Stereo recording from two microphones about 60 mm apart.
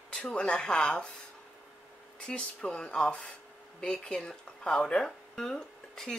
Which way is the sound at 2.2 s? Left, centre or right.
Centre.